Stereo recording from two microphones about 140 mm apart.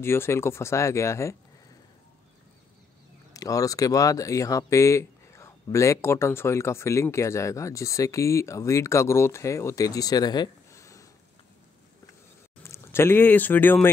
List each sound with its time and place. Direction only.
0.0 s speech: 15° left (ahead or behind)
3.3 s speech: 25° left (ahead or behind)
12.6 s speech: 20° left (ahead or behind)